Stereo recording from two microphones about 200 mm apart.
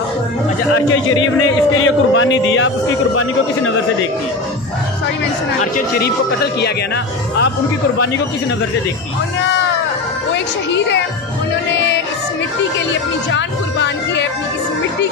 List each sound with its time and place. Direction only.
1.8 s speech: 85° left
5.6 s speech: 45° left (ahead or behind)
10.3 s speech: 65° left (ahead or behind)
11.7 s music: 65° left (ahead or behind)
13.3 s speech: 65° left (ahead or behind)